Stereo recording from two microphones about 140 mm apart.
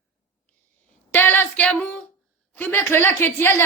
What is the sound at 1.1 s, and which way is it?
A woman's voice, 15° left (ahead or behind).